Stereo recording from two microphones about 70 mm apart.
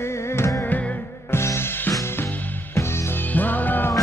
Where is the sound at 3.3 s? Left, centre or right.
Left.